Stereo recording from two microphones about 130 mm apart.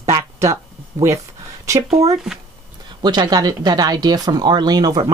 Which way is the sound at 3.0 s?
30° right (ahead or behind).